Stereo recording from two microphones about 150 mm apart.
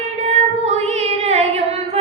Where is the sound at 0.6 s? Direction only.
45° right (ahead or behind).